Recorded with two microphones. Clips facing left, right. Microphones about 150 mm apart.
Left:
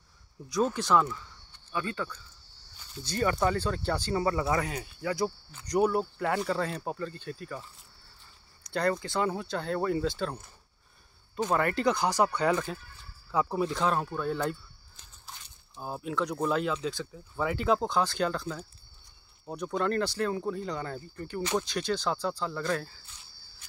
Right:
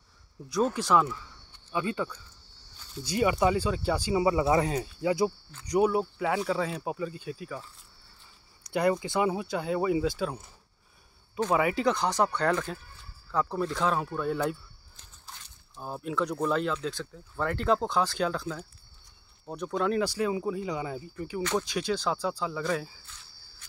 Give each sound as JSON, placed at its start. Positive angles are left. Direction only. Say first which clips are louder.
{"t": 0.5, "sound": "speech", "louder": "right 1 dB", "side_deg": -5}
{"t": 1.7, "sound": "speech", "louder": "right 3 dB", "side_deg": -15}
{"t": 4.5, "sound": "speech", "louder": "right 5 dB", "side_deg": -25}
{"t": 5.0, "sound": "speech", "louder": "right 4 dB", "side_deg": -20}
{"t": 5.7, "sound": "speech", "louder": "right 1 dB", "side_deg": -5}
{"t": 8.6, "sound": "speech", "louder": "right 3 dB", "side_deg": -10}
{"t": 11.5, "sound": "speech", "louder": "right 1 dB", "side_deg": -5}